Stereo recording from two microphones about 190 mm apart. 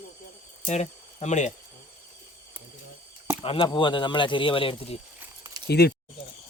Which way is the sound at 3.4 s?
30° left (ahead or behind).